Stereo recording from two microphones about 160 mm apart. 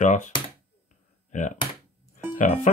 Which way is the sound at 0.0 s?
50° left (ahead or behind).